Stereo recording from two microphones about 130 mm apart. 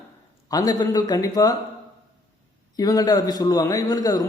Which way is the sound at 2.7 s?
30° left (ahead or behind).